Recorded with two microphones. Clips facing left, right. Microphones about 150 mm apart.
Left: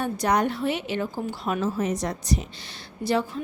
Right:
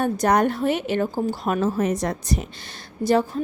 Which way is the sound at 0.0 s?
50° right (ahead or behind).